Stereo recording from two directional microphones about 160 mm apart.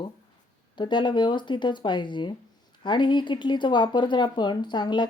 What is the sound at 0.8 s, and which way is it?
Speech, 30° left (ahead or behind).